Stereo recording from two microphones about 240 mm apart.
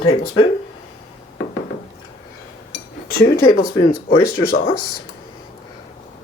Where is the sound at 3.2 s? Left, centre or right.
Left.